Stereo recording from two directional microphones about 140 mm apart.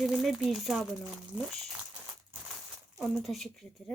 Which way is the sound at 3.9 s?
Centre (ahead or behind).